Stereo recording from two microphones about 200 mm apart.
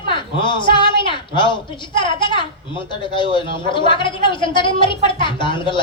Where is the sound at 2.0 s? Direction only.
25° left (ahead or behind).